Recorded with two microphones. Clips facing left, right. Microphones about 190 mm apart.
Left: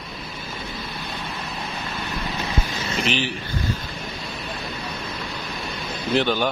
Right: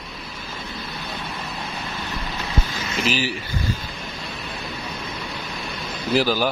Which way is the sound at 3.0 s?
5° right (ahead or behind).